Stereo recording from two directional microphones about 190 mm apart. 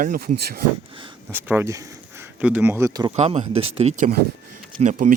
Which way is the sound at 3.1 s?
35° right (ahead or behind).